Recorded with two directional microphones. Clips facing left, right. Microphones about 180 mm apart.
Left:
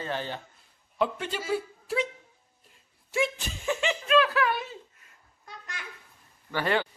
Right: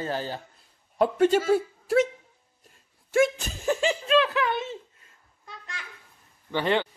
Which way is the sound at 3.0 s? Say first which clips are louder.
Right 7 dB; 45° right (ahead or behind).